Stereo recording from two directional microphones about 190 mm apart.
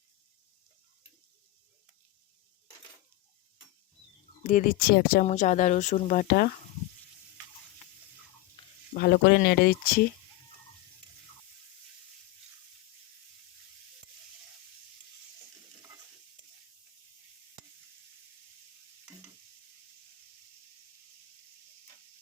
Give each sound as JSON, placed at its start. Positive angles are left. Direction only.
{"t": 4.4, "sound": "speech", "side_deg": 45}
{"t": 8.9, "sound": "speech", "side_deg": 55}